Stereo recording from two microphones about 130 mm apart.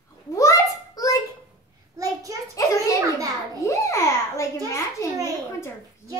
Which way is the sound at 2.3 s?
25° right (ahead or behind).